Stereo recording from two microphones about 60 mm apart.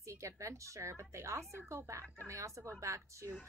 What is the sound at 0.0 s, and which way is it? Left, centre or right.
A woman's voice, right.